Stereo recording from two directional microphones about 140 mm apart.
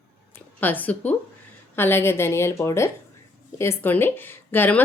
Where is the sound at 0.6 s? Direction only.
10° left (ahead or behind).